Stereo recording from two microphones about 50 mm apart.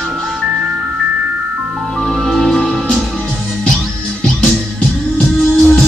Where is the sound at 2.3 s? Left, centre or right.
Centre.